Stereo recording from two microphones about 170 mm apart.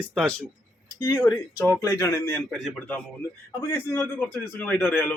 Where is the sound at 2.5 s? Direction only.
Centre (ahead or behind).